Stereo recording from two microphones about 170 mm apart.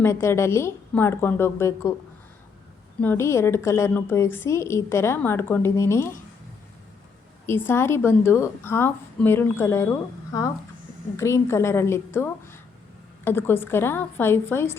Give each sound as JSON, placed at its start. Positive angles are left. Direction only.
{"t": 0.0, "sound": "a woman's voice", "side_deg": 15}
{"t": 3.0, "sound": "a woman's voice", "side_deg": 15}
{"t": 7.4, "sound": "a woman's voice", "side_deg": 15}
{"t": 11.2, "sound": "a woman's voice", "side_deg": 15}